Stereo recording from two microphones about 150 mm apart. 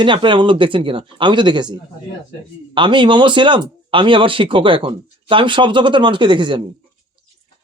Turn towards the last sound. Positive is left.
turn(degrees=-30)  # may be behind; listen again after turning